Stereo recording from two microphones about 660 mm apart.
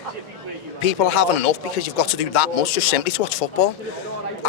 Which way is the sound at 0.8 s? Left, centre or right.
Left.